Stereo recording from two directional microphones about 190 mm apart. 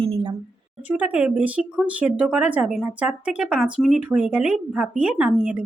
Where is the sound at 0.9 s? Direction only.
10° right (ahead or behind).